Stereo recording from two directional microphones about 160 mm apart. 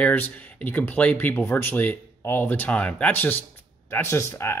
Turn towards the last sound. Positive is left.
turn(degrees=15)  # may be behind; listen again after turning